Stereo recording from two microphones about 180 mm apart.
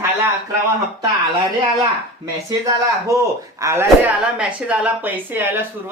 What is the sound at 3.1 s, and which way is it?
A woman's voice, 15° right (ahead or behind).